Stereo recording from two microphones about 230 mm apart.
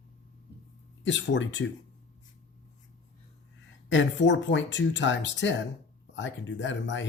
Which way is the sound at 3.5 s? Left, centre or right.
Left.